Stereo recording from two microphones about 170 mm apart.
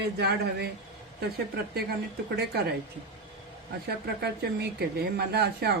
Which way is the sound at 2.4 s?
70° right (ahead or behind).